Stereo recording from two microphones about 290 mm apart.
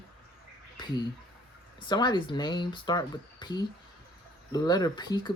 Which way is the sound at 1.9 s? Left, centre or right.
Centre.